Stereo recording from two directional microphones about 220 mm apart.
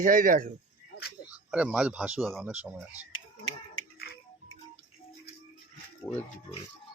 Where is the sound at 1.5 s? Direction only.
5° right (ahead or behind).